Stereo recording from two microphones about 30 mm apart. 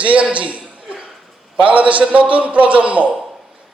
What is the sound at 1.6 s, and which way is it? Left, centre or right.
A man's voice, right.